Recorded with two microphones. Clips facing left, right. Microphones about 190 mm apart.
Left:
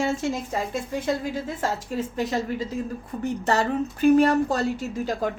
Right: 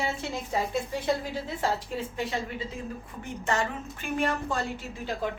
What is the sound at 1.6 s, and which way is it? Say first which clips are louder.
A woman's voice: left 1 dB; 40° left (ahead or behind).